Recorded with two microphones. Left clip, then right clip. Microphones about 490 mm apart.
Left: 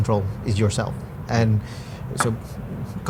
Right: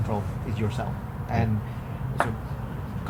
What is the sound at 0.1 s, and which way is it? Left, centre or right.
Speech, left.